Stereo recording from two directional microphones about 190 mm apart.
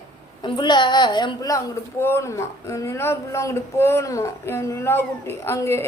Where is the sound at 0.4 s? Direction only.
25° left (ahead or behind).